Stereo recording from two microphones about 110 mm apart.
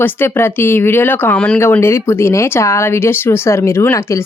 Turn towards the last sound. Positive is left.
turn(degrees=25)  # may be behind; listen again after turning